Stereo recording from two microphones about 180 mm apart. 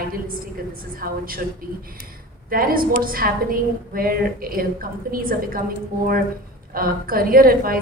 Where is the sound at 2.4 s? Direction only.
55° right (ahead or behind).